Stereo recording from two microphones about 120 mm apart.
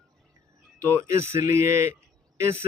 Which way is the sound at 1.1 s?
20° right (ahead or behind).